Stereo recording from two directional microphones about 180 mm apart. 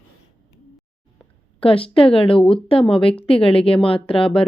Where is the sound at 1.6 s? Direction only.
30° left (ahead or behind).